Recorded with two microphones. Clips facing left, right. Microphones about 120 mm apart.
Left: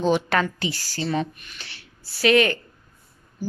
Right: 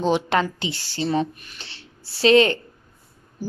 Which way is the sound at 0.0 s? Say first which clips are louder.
Right 1 dB; 25° right (ahead or behind).